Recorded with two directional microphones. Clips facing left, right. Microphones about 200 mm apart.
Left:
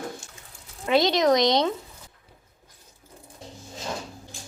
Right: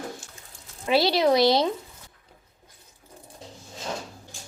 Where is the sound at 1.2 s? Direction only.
5° right (ahead or behind).